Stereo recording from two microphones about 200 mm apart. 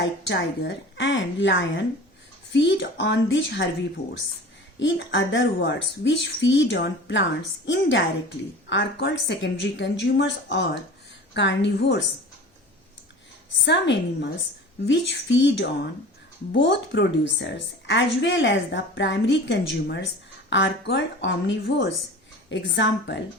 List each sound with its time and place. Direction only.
0.0 s a woman's voice: 60° left (ahead or behind)
4.8 s a woman's voice: 65° left (ahead or behind)
13.7 s a woman's voice: 60° left (ahead or behind)